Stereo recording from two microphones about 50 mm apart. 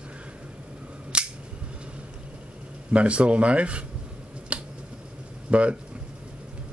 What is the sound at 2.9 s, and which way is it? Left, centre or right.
Speech, right.